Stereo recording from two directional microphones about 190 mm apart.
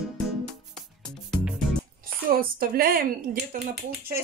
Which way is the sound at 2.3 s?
50° right (ahead or behind).